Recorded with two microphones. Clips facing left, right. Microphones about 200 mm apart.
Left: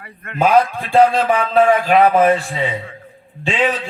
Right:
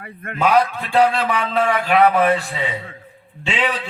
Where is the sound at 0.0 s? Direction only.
50° right (ahead or behind).